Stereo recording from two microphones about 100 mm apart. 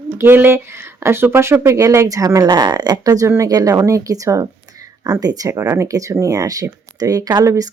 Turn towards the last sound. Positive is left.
turn(degrees=-40)  # may be behind; listen again after turning